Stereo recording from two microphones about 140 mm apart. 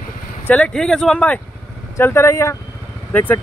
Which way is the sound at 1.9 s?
20° left (ahead or behind).